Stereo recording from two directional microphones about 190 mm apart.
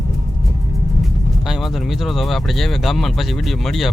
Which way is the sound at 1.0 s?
Centre (ahead or behind).